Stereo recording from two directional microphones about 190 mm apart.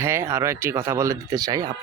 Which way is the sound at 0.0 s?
15° right (ahead or behind).